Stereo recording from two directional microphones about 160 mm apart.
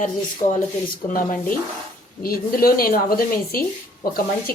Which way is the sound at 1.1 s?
60° left (ahead or behind).